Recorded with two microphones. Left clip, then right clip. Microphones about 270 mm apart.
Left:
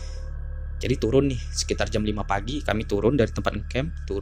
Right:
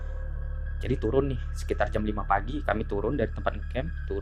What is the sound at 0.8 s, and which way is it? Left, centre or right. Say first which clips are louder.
Speech: left 5 dB; left.